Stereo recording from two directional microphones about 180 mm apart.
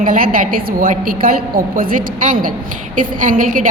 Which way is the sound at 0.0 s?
50° right (ahead or behind).